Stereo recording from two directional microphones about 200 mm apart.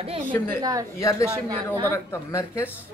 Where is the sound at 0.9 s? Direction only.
15° left (ahead or behind).